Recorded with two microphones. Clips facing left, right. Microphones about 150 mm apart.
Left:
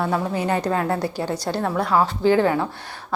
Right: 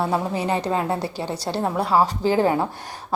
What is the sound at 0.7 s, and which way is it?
Speech, 15° right (ahead or behind).